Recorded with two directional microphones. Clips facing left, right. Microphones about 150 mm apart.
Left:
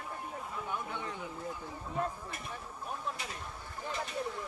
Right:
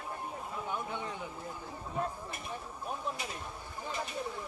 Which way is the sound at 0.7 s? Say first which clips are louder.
Right 1 dB; 20° right (ahead or behind).